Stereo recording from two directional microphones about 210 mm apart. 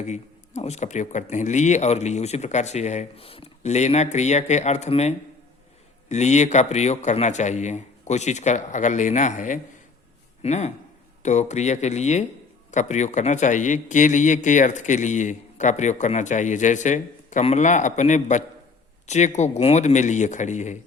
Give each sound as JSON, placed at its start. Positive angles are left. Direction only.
{"t": 0.0, "sound": "a man's voice", "side_deg": 30}